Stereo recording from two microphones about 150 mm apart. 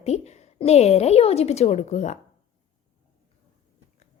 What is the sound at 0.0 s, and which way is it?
A woman's voice, 45° left (ahead or behind).